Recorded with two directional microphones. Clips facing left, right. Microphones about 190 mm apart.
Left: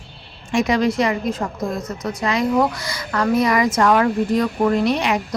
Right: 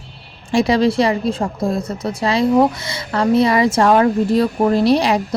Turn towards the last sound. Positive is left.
turn(degrees=-35)  # may be behind; listen again after turning